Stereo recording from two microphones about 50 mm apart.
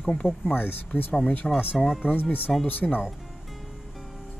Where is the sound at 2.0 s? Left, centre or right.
Left.